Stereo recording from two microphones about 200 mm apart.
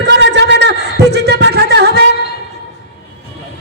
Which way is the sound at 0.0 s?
60° right (ahead or behind).